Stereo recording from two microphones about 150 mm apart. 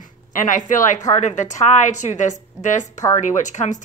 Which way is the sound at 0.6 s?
55° left (ahead or behind).